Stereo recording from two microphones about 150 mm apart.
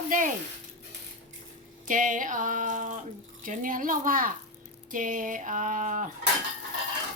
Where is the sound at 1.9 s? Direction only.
60° right (ahead or behind).